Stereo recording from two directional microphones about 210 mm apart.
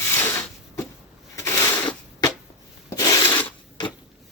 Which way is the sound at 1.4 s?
15° left (ahead or behind).